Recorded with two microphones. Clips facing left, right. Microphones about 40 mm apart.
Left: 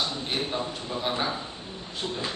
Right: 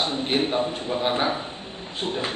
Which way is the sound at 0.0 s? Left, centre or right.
Right.